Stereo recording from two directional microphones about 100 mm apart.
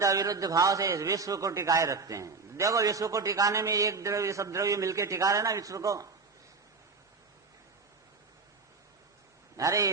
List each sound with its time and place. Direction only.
0.0 s a man's voice: 35° right (ahead or behind)
9.6 s a man's voice: 35° right (ahead or behind)